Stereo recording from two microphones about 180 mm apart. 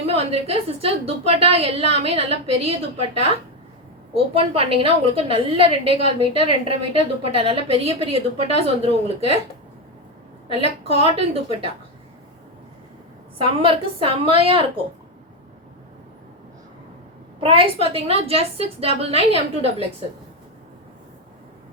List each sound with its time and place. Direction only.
0.0 s a woman's voice: 35° right (ahead or behind)
4.1 s a woman's voice: 35° right (ahead or behind)
10.8 s a woman's voice: 35° right (ahead or behind)
13.4 s a woman's voice: 30° right (ahead or behind)
17.4 s a woman's voice: 30° right (ahead or behind)